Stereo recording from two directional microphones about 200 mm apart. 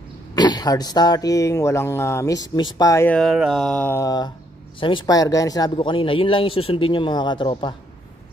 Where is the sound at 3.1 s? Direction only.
Centre (ahead or behind).